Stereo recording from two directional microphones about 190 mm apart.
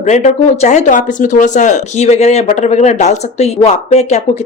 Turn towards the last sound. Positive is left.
turn(degrees=35)  # may be behind; listen again after turning